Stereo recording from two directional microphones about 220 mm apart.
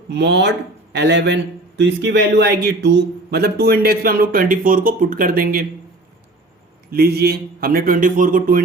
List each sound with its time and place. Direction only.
0.1 s speech: 50° right (ahead or behind)
6.9 s speech: 45° right (ahead or behind)